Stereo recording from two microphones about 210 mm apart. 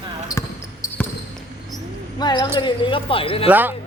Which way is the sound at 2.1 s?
20° left (ahead or behind).